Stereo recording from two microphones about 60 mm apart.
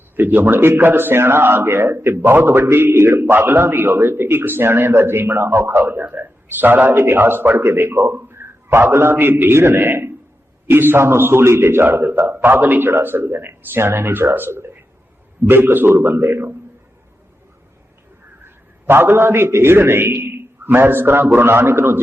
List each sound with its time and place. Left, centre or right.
0.2 s a man's voice: right
18.4 s a man's voice: right